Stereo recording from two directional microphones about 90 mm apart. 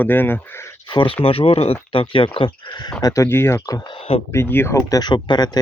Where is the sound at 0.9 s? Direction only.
70° left (ahead or behind).